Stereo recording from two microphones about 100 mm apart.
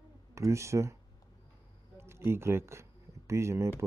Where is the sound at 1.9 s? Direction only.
25° right (ahead or behind).